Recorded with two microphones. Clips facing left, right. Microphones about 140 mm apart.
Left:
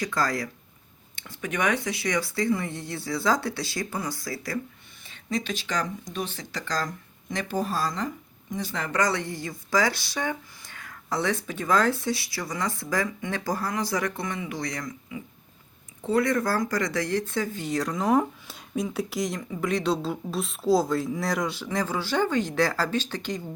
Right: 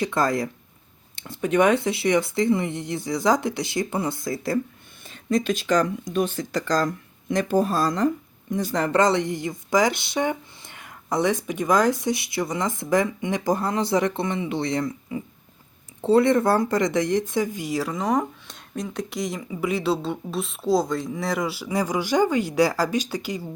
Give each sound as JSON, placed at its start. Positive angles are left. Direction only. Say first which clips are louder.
{"t": 0.0, "sound": "speech", "louder": "right 5 dB", "side_deg": -25}
{"t": 5.0, "sound": "speech", "louder": "right 7 dB", "side_deg": -45}
{"t": 9.0, "sound": "speech", "louder": "right 5 dB", "side_deg": -20}